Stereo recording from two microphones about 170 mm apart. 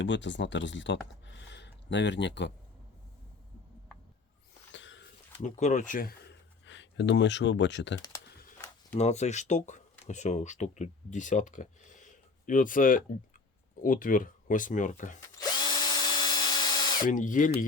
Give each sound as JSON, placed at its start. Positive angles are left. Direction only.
{"t": 0.0, "sound": "speech", "side_deg": 90}
{"t": 4.7, "sound": "a sound", "side_deg": 90}
{"t": 5.4, "sound": "speech", "side_deg": 45}
{"t": 9.0, "sound": "speech", "side_deg": 40}
{"t": 15.4, "sound": "drill", "side_deg": 25}
{"t": 17.1, "sound": "speech", "side_deg": 50}